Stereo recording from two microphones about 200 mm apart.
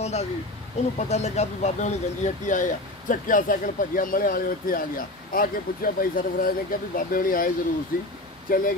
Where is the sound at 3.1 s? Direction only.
40° left (ahead or behind).